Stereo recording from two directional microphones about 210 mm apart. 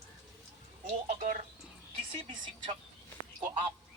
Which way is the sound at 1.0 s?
40° right (ahead or behind).